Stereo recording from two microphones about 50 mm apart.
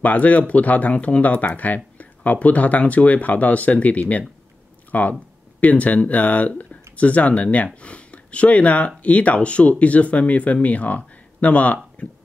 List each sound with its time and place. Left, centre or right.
0.0 s speech: left